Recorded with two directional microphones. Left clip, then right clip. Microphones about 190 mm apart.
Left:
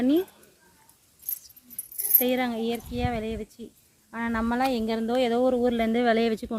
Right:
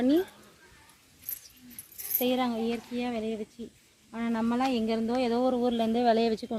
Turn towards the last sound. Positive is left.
turn(degrees=45)  # may be behind; listen again after turning